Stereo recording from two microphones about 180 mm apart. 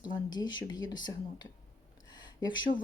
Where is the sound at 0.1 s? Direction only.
25° left (ahead or behind).